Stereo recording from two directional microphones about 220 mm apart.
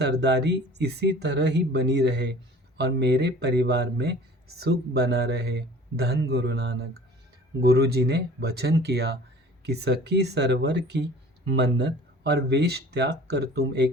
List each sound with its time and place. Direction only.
0.0 s speech: 50° right (ahead or behind)